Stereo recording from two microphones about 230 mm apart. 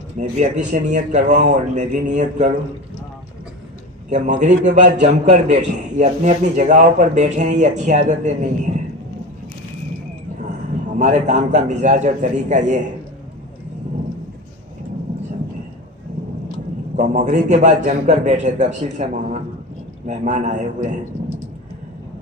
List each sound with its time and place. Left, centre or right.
0.2 s speech: right
4.1 s speech: right
10.9 s speech: right
17.0 s speech: right